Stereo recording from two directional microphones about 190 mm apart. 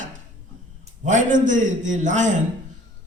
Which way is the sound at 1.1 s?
40° right (ahead or behind).